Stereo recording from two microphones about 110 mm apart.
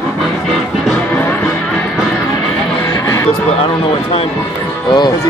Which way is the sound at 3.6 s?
55° left (ahead or behind).